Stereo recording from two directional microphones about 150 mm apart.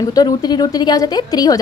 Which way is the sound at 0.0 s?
25° left (ahead or behind).